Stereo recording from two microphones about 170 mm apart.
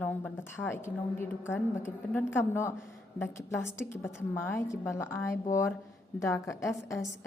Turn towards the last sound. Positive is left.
turn(degrees=15)  # may be behind; listen again after turning